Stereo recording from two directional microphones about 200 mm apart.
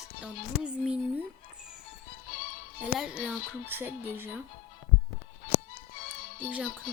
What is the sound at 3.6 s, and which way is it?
Music, 10° right (ahead or behind).